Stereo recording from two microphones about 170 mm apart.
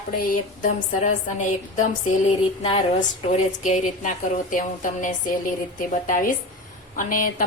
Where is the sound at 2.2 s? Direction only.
35° left (ahead or behind).